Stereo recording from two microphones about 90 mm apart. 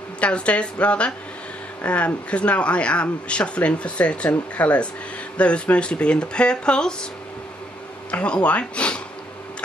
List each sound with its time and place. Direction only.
0.2 s speech: 15° left (ahead or behind)
8.1 s speech: 15° left (ahead or behind)